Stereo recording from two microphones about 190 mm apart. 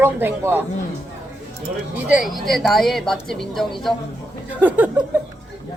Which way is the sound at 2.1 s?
Centre (ahead or behind).